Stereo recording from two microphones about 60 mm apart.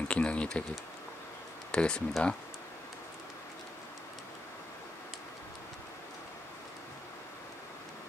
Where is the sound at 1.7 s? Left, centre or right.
Centre.